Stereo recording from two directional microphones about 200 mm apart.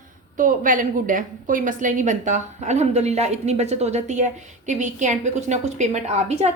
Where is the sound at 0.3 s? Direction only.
40° right (ahead or behind).